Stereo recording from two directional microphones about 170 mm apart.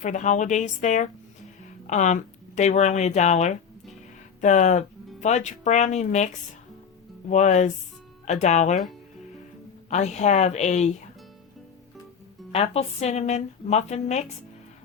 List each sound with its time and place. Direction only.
0.0 s speech: 45° left (ahead or behind)
9.9 s speech: 40° left (ahead or behind)
12.5 s a woman's voice: 35° left (ahead or behind)